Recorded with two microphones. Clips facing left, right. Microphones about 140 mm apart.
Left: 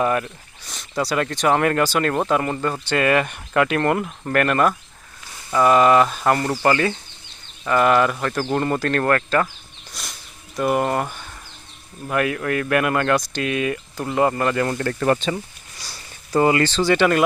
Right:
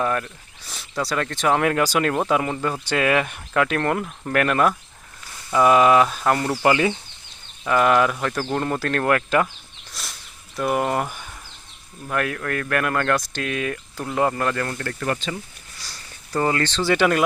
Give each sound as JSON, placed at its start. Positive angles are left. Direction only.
{"t": 0.0, "sound": "speech", "side_deg": 5}
{"t": 9.9, "sound": "a sound", "side_deg": 0}
{"t": 12.0, "sound": "speech", "side_deg": 5}
{"t": 14.6, "sound": "speech", "side_deg": 20}
{"t": 15.0, "sound": "speech", "side_deg": 35}
{"t": 15.8, "sound": "speech", "side_deg": 10}